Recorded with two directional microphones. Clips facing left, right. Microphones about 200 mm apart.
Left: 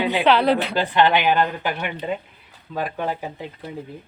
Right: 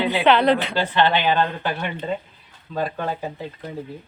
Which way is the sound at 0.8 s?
15° left (ahead or behind).